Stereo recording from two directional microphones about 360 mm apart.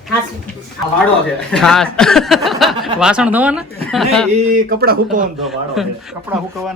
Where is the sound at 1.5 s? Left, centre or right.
Centre.